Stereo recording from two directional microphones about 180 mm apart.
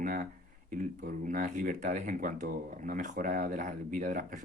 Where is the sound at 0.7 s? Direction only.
50° right (ahead or behind).